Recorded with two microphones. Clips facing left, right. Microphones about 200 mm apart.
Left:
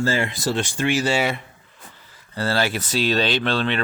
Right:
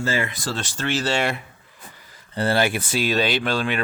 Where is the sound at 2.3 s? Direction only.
20° right (ahead or behind).